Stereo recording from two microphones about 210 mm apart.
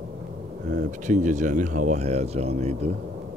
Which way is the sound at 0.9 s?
35° right (ahead or behind).